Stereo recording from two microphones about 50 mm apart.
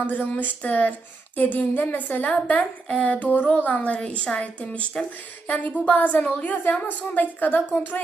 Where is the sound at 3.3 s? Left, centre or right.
Left.